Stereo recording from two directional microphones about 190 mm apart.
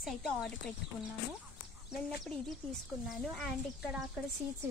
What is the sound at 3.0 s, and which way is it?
Speech, centre (ahead or behind).